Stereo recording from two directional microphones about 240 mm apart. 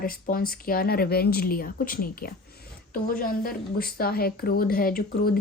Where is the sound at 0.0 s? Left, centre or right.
Left.